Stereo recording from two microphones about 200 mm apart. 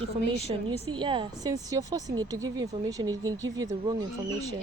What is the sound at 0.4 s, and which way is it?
A woman's voice, 25° right (ahead or behind).